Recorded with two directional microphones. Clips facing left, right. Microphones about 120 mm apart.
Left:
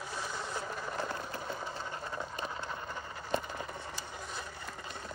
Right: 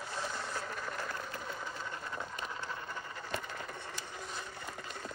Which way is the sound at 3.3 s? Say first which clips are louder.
Left 7 dB; 25° left (ahead or behind).